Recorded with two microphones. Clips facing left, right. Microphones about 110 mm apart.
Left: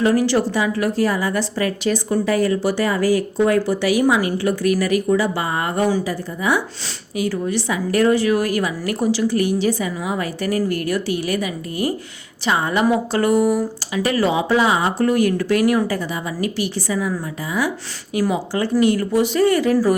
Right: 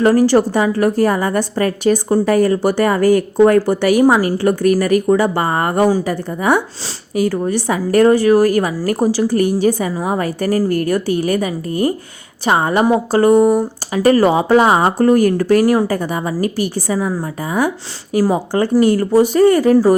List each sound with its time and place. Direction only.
0.0 s a woman's voice: 45° right (ahead or behind)
13.9 s a woman's voice: 40° right (ahead or behind)
15.9 s a woman's voice: 45° right (ahead or behind)
19.7 s speech: 30° right (ahead or behind)